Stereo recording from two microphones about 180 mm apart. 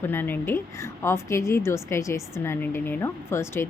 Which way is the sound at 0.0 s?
10° left (ahead or behind).